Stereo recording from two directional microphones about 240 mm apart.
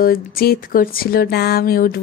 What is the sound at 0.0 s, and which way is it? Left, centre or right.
A woman's voice, left.